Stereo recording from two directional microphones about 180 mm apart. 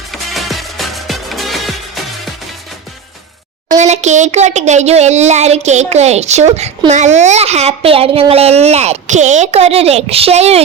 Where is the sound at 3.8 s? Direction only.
40° right (ahead or behind).